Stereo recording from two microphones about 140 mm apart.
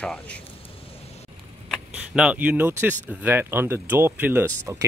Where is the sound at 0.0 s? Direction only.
5° left (ahead or behind).